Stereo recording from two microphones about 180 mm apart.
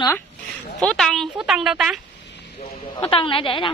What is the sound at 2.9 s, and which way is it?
Speech, 30° left (ahead or behind).